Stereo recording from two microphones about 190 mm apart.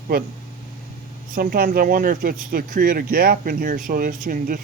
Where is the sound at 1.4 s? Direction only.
50° right (ahead or behind).